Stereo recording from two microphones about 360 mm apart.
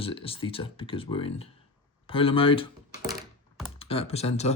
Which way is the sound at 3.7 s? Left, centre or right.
Centre.